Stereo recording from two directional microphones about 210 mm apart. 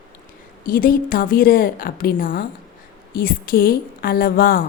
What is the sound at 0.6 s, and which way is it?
A woman's voice, 40° left (ahead or behind).